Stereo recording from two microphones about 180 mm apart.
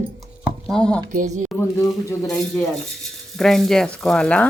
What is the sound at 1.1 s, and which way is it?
Speech, 45° right (ahead or behind).